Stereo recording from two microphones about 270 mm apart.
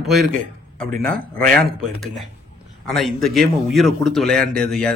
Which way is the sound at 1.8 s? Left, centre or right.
Centre.